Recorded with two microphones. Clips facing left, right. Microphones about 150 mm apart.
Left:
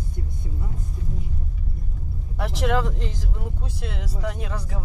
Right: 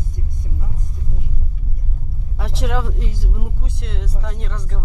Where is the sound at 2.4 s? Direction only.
Centre (ahead or behind).